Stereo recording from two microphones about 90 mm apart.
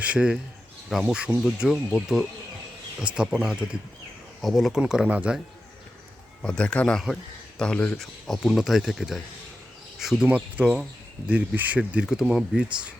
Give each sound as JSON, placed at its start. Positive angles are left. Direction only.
{"t": 0.0, "sound": "speech", "side_deg": -10}
{"t": 3.2, "sound": "speech", "side_deg": -5}
{"t": 6.4, "sound": "speech", "side_deg": 10}
{"t": 10.2, "sound": "speech", "side_deg": -15}